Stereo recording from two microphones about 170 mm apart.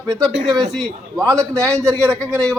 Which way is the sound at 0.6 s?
Centre (ahead or behind).